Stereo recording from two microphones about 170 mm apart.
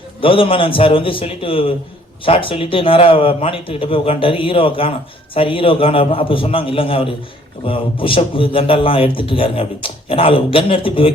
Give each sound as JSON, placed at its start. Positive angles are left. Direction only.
{"t": 0.2, "sound": "a man's voice", "side_deg": 30}